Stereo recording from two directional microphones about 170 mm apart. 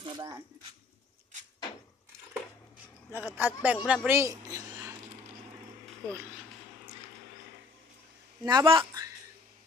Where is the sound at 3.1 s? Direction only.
10° right (ahead or behind).